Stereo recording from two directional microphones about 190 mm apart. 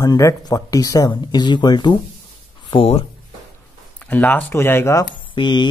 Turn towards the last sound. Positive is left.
turn(degrees=25)  # may be behind; listen again after turning